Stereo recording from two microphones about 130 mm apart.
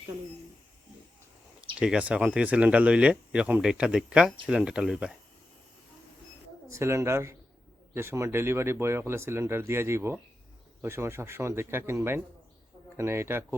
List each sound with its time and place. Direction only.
1.8 s speech: 10° right (ahead or behind)
6.7 s speech: 20° right (ahead or behind)